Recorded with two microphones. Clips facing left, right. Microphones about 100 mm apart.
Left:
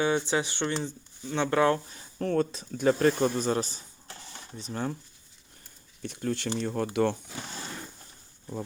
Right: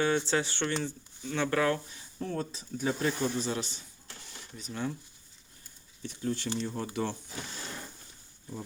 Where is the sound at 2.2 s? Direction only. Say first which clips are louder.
Left 8 dB; 75° left (ahead or behind); by 4.9 s 40° left (ahead or behind).